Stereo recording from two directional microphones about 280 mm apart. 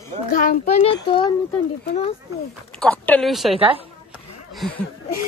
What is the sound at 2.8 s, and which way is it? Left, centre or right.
Speech, centre.